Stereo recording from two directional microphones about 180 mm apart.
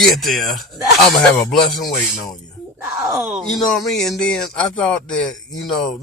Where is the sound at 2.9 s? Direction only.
15° right (ahead or behind).